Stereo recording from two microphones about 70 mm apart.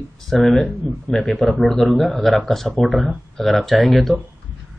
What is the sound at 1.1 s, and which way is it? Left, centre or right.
Speech, centre.